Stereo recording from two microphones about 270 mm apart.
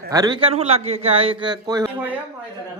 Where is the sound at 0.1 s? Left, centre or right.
Centre.